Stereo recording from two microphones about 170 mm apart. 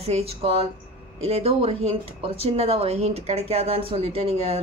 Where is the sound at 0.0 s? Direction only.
35° right (ahead or behind).